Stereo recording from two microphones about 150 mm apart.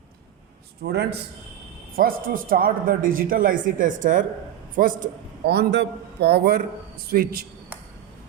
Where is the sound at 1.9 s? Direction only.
75° right (ahead or behind); by 6.6 s 90° right.